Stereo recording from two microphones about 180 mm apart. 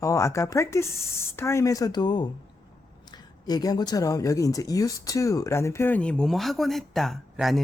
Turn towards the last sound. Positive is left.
turn(degrees=0)  # may be behind; listen again after turning